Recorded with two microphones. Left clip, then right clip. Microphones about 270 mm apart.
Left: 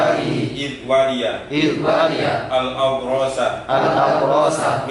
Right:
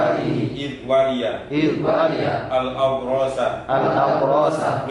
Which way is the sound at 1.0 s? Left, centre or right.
Centre.